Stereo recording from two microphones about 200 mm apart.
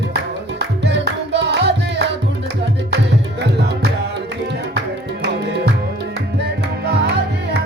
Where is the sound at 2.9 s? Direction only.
55° right (ahead or behind).